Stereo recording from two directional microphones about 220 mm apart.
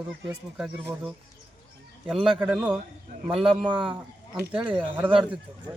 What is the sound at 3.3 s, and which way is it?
Speech, 25° right (ahead or behind).